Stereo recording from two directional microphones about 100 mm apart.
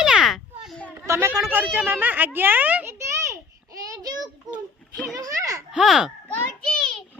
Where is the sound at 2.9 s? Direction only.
30° right (ahead or behind).